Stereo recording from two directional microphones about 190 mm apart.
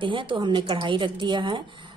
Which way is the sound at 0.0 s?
25° right (ahead or behind).